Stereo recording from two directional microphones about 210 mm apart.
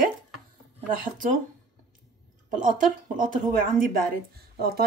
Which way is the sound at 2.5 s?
40° right (ahead or behind).